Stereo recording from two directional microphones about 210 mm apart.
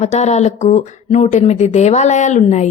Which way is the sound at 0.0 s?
30° left (ahead or behind).